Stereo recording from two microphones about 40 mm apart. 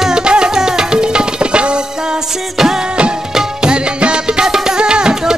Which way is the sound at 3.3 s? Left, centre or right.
Right.